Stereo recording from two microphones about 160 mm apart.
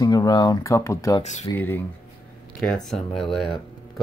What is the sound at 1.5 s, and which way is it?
Speech, 10° left (ahead or behind).